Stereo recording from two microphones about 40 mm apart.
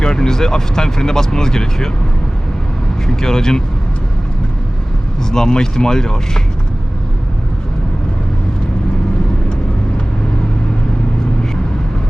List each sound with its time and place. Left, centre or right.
0.0 s speech: centre
3.1 s speech: centre
5.3 s speech: centre